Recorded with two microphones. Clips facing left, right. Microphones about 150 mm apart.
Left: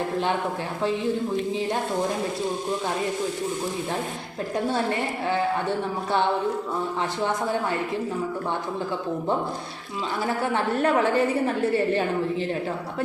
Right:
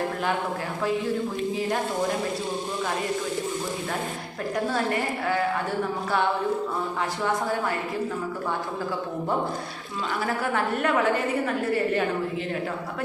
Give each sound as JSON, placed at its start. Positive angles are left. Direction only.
{"t": 4.7, "sound": "a woman's voice", "side_deg": 25}
{"t": 10.4, "sound": "a woman's voice", "side_deg": 25}